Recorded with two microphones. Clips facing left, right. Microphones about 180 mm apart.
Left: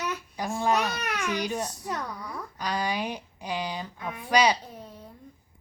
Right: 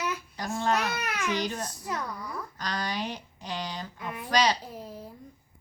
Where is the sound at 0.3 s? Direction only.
15° left (ahead or behind).